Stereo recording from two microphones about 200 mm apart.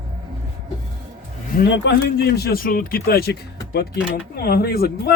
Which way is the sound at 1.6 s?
60° left (ahead or behind).